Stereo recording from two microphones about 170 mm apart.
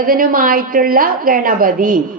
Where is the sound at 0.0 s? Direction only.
55° right (ahead or behind).